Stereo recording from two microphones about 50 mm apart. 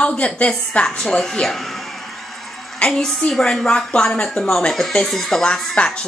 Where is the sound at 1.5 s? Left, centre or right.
Centre.